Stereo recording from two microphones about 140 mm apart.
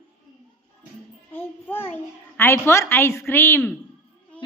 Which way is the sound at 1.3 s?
15° left (ahead or behind).